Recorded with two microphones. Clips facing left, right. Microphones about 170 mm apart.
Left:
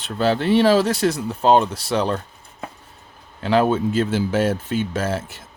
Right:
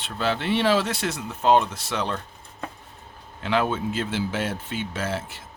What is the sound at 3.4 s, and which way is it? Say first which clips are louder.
Speech: left 6 dB; 40° left (ahead or behind).